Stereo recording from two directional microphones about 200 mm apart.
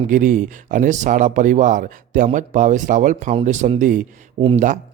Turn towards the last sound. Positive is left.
turn(degrees=-25)  # may be behind; listen again after turning